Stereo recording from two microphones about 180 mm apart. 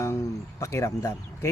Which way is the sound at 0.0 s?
15° left (ahead or behind).